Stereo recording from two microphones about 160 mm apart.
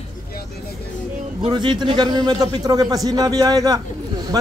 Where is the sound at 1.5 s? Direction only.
30° right (ahead or behind).